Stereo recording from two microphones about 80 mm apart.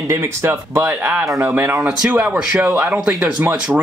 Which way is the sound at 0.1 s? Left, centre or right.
Right.